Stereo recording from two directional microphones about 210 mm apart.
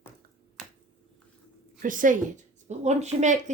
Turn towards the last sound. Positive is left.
turn(degrees=-35)  # may be behind; listen again after turning